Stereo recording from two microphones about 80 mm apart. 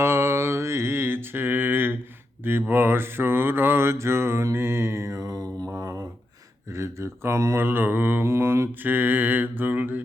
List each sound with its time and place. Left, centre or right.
0.0 s mantra: right